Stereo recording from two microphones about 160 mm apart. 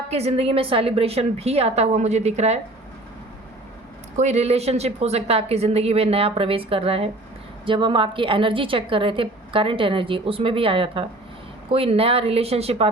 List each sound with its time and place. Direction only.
0.1 s a woman's voice: 40° right (ahead or behind)
4.2 s a woman's voice: 45° right (ahead or behind)